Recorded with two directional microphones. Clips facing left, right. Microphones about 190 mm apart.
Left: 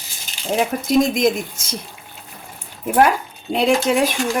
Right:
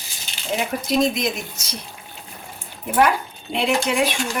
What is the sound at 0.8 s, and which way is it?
Speech, 50° left (ahead or behind).